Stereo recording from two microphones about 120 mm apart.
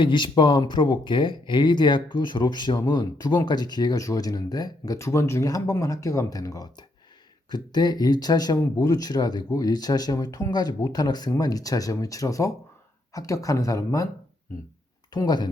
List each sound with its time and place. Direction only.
0.0 s speech: 40° left (ahead or behind)
15.1 s speech: 35° left (ahead or behind)